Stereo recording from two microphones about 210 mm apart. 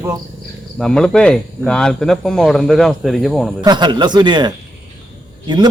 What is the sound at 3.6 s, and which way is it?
A man's voice, 20° right (ahead or behind).